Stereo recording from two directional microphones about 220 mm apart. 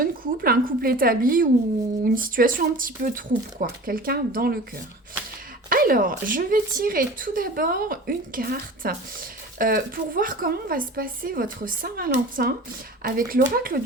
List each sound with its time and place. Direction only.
0.0 s speech: 40° right (ahead or behind)
5.6 s speech: 40° right (ahead or behind)